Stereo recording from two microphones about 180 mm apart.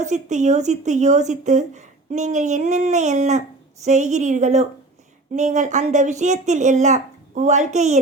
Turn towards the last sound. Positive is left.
turn(degrees=-40)  # may be behind; listen again after turning